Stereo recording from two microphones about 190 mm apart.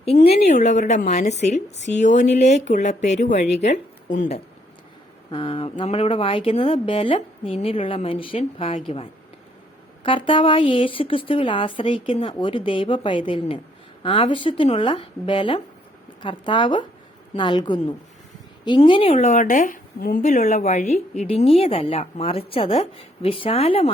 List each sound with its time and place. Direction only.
0.0 s a woman's voice: 30° left (ahead or behind)
5.3 s speech: 30° left (ahead or behind)
10.0 s speech: 25° left (ahead or behind)
19.1 s a woman's voice: 40° left (ahead or behind)